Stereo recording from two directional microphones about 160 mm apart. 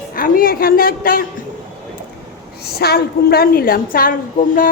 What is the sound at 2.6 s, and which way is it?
A woman's voice, 85° left.